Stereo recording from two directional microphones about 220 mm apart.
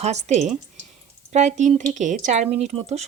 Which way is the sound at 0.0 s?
30° right (ahead or behind).